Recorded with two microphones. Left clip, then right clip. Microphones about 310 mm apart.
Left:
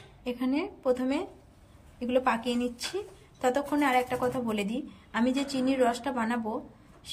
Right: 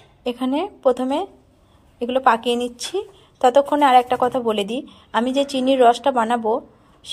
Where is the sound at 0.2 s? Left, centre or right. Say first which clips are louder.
Right 9 dB; right.